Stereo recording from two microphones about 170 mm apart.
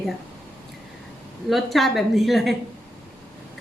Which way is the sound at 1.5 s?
Centre (ahead or behind).